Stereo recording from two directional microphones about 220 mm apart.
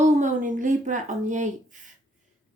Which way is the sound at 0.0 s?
35° right (ahead or behind).